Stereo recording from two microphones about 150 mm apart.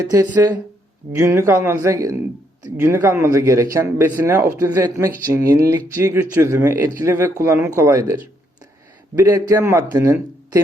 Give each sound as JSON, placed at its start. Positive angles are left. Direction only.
{"t": 0.4, "sound": "speech", "side_deg": -15}